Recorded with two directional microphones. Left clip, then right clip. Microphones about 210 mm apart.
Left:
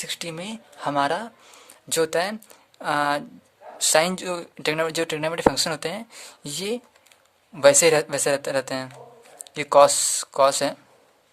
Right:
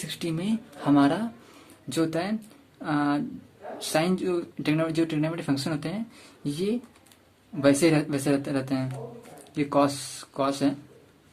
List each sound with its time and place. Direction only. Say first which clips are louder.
0.0 s speech: left 1 dB; 40° left (ahead or behind)